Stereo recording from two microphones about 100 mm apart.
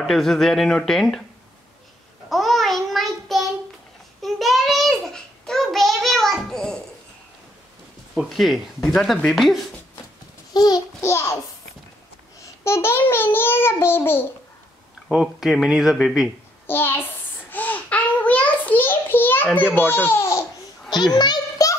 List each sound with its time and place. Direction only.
0.0 s speech: centre (ahead or behind)
2.2 s child singing: centre (ahead or behind)
8.1 s speech: centre (ahead or behind)
10.5 s babbling: 40° left (ahead or behind)
11.0 s a sound: 30° left (ahead or behind)
12.6 s a child's voice: 25° left (ahead or behind)
15.0 s speech: 5° right (ahead or behind)
16.6 s a sound: 20° left (ahead or behind)
21.1 s a sound: 45° left (ahead or behind)